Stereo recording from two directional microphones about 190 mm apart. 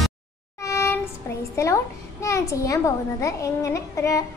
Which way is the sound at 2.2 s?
15° left (ahead or behind).